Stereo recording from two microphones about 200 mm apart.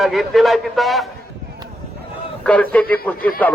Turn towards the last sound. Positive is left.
turn(degrees=5)  # may be behind; listen again after turning